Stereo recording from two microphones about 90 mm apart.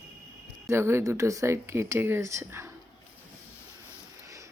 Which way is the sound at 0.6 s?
30° right (ahead or behind).